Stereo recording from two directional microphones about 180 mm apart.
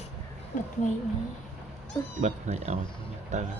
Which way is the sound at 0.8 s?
45° left (ahead or behind).